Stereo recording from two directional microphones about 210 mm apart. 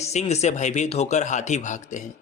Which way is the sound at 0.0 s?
30° left (ahead or behind).